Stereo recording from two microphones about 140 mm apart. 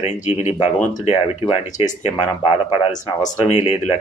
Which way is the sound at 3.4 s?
55° left (ahead or behind).